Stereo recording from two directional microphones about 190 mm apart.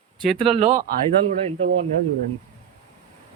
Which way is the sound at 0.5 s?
40° right (ahead or behind).